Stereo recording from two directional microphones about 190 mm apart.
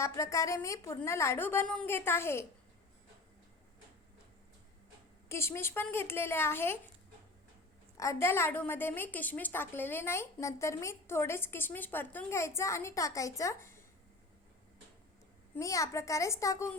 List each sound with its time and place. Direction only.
0.0 s a woman's voice: 15° left (ahead or behind)
5.3 s a woman's voice: 15° left (ahead or behind)
7.9 s a woman's voice: 15° left (ahead or behind)
15.5 s a woman's voice: 15° left (ahead or behind)